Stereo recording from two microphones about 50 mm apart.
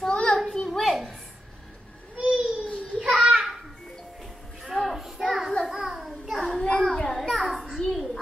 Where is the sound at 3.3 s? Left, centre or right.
Centre.